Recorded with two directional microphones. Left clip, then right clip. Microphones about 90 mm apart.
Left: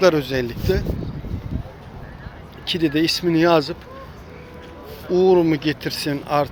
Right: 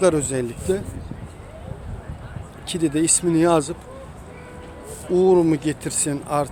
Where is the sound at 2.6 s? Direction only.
20° right (ahead or behind).